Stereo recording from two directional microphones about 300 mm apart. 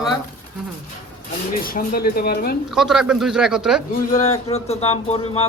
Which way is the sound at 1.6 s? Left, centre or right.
Left.